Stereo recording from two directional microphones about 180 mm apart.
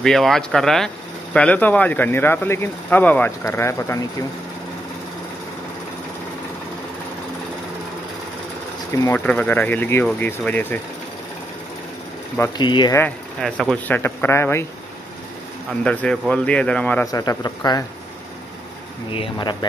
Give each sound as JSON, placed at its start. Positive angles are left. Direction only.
{"t": 0.0, "sound": "speech", "side_deg": 0}
{"t": 8.9, "sound": "speech", "side_deg": 10}
{"t": 12.5, "sound": "a man's voice", "side_deg": 25}
{"t": 13.4, "sound": "speech", "side_deg": 5}
{"t": 15.8, "sound": "speech", "side_deg": 5}
{"t": 17.1, "sound": "a man's voice", "side_deg": 20}
{"t": 19.1, "sound": "a man's voice", "side_deg": 25}